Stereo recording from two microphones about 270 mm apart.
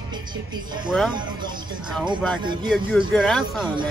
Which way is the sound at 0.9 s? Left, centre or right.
Centre.